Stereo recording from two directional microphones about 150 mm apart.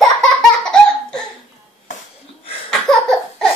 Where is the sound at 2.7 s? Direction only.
5° left (ahead or behind).